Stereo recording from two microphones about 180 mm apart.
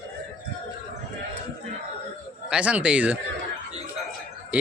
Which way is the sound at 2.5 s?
5° right (ahead or behind).